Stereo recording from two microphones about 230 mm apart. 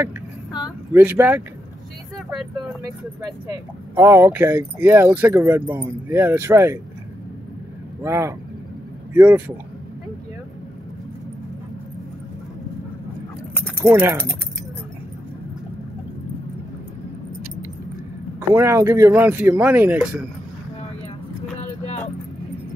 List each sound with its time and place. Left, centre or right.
0.5 s a sound: centre
0.9 s speech: centre
3.2 s speech: centre
8.0 s speech: centre
13.8 s speech: centre
18.5 s speech: centre
21.5 s vehicle: left